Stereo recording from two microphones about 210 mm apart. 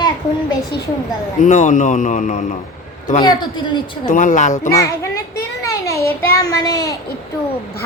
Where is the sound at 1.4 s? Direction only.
35° left (ahead or behind).